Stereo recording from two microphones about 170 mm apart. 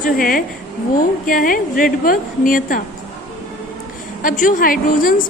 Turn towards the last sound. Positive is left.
turn(degrees=55)  # may be behind; listen again after turning